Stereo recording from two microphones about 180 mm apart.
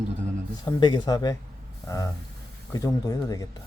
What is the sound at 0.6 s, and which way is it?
Speech, 25° left (ahead or behind).